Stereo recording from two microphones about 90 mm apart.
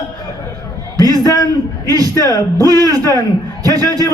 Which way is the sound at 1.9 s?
45° right (ahead or behind).